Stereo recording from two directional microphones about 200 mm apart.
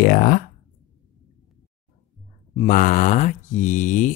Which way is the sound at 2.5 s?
40° left (ahead or behind).